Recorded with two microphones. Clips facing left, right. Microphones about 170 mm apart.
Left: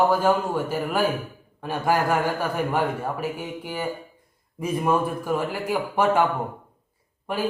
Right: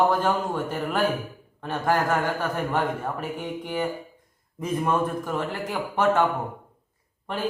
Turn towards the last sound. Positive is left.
turn(degrees=10)  # may be behind; listen again after turning